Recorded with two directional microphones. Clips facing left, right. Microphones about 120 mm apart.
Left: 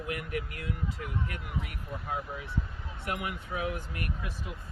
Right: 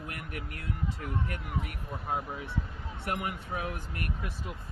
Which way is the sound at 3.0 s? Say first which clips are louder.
Right 1 dB; 35° right (ahead or behind).